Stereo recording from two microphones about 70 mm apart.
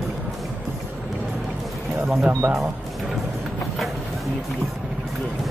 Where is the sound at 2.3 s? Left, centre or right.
Right.